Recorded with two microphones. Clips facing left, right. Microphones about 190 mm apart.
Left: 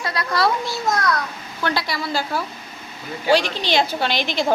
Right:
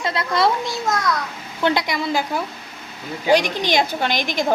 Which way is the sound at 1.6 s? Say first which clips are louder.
Right 4 dB; 20° right (ahead or behind).